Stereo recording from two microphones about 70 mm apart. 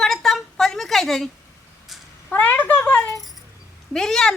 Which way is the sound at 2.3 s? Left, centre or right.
Left.